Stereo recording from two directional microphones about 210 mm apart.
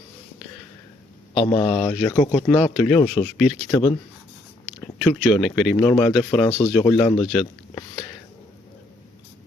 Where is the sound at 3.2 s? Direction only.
Centre (ahead or behind).